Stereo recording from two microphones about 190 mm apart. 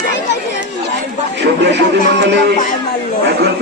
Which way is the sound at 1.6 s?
65° right (ahead or behind).